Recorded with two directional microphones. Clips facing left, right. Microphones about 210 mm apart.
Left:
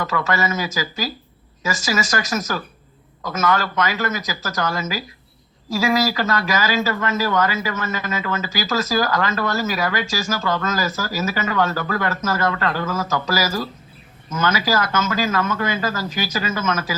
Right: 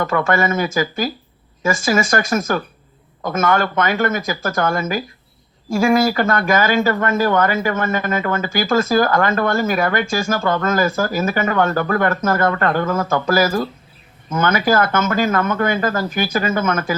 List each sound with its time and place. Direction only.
0.0 s speech: 55° right (ahead or behind)